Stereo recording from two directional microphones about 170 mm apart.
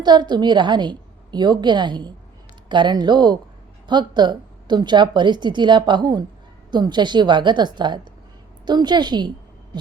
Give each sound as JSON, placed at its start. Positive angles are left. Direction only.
{"t": 0.0, "sound": "a woman's voice", "side_deg": -25}